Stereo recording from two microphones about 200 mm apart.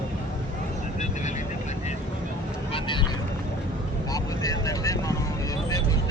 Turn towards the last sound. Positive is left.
turn(degrees=15)  # may be behind; listen again after turning